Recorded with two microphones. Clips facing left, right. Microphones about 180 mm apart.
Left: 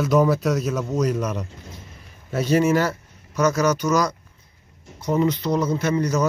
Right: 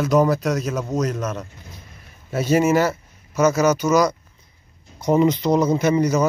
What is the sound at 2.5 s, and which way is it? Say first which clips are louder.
Speech: right 2 dB; 10° right (ahead or behind).